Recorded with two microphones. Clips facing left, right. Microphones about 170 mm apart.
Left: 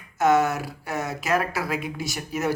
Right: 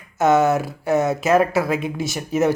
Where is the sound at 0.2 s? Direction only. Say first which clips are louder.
Right 4 dB; 25° right (ahead or behind).